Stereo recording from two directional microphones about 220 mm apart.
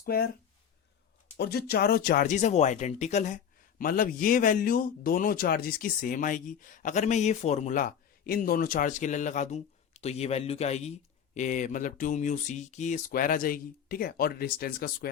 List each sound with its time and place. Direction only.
0.0 s speech: 45° left (ahead or behind)
1.4 s speech: 45° left (ahead or behind)